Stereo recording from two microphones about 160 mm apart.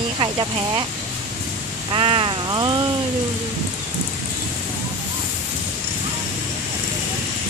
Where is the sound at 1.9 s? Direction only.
30° right (ahead or behind).